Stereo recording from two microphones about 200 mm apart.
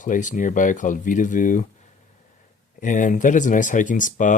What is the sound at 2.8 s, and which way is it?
Speech, 40° left (ahead or behind).